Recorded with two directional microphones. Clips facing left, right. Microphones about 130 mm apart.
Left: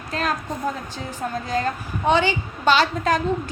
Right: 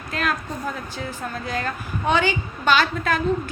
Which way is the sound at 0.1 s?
30° left (ahead or behind).